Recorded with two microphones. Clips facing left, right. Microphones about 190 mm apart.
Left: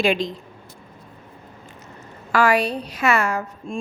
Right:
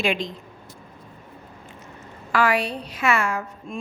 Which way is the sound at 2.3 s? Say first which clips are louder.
Left 3 dB; 45° left (ahead or behind).